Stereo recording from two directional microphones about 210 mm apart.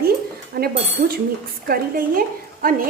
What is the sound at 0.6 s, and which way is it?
A woman's voice, 45° right (ahead or behind).